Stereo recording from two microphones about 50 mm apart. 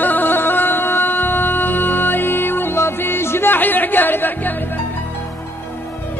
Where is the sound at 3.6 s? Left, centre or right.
Left.